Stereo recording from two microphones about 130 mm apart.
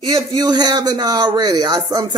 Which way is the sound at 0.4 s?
30° right (ahead or behind).